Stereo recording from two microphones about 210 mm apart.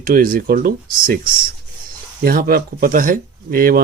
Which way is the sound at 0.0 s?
45° right (ahead or behind).